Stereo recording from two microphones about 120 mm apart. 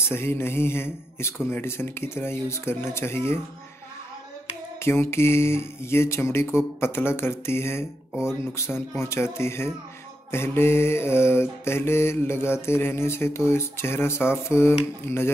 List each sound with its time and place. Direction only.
0.1 s mantra: 20° left (ahead or behind)
4.7 s mantra: 20° left (ahead or behind)